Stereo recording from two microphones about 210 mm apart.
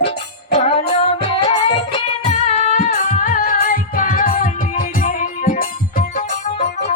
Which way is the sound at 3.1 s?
45° left (ahead or behind).